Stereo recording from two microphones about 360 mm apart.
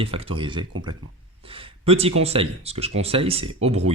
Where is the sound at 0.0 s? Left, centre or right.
Centre.